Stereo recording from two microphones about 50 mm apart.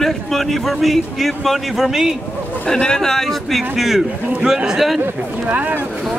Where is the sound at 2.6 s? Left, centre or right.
Centre.